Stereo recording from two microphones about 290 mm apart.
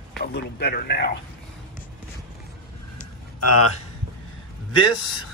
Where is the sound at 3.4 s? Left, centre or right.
Left.